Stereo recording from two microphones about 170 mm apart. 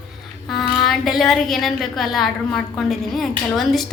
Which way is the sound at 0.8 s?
Centre (ahead or behind).